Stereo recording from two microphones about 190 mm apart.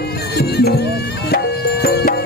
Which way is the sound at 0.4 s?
55° left (ahead or behind).